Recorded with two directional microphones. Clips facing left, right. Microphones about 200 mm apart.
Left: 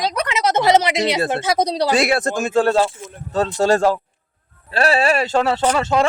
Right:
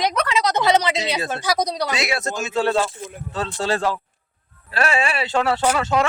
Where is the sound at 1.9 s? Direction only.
50° left (ahead or behind).